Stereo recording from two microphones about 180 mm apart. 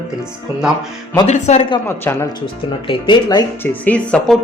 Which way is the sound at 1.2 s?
40° left (ahead or behind).